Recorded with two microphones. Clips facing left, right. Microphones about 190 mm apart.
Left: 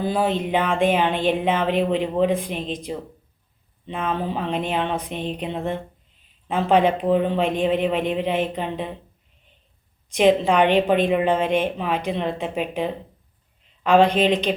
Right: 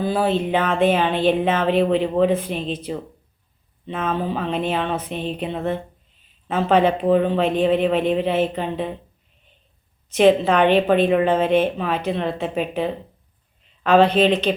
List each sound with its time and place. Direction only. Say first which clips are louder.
0.0 s speech: right 2 dB; 15° left (ahead or behind)
10.1 s speech: right 2 dB; 15° left (ahead or behind)